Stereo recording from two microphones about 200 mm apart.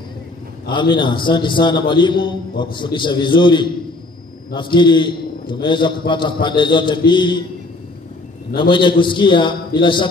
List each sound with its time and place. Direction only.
0.7 s a man's voice: 25° left (ahead or behind)
8.5 s a man's voice: 25° left (ahead or behind)